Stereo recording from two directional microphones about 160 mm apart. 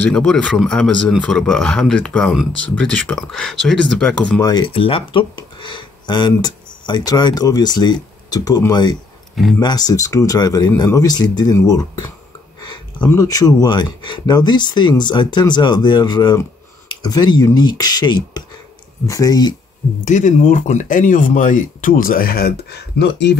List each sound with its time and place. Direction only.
0.1 s speech: 5° left (ahead or behind)
4.4 s speech: 25° left (ahead or behind)
9.3 s speech: centre (ahead or behind)
9.6 s speech: 25° left (ahead or behind)
20.1 s speech: 50° left (ahead or behind); by 23.3 s 90° left